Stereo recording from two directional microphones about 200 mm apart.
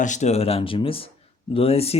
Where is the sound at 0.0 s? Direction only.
35° left (ahead or behind).